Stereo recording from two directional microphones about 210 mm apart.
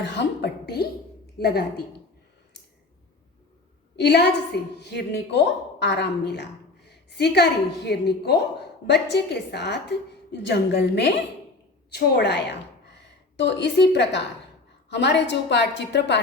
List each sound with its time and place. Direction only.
0.0 s a woman's voice: 55° left (ahead or behind)
3.9 s a woman's voice: 55° left (ahead or behind)